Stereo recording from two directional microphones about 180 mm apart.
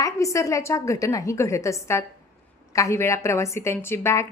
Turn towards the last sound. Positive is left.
turn(degrees=15)  # may be behind; listen again after turning